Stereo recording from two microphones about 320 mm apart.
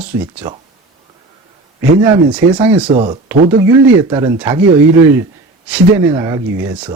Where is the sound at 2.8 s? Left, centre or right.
Centre.